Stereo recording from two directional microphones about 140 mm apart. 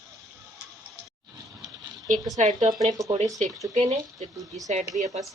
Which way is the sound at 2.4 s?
55° right (ahead or behind).